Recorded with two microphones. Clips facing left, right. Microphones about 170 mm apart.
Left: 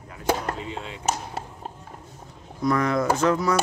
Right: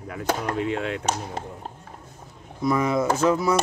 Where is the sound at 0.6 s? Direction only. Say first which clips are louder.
Right 8 dB; 65° right (ahead or behind).